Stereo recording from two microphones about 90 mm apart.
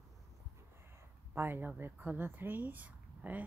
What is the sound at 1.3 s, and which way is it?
Speech, 25° right (ahead or behind).